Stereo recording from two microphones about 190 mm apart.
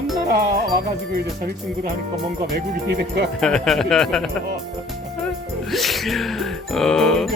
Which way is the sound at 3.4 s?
5° left (ahead or behind).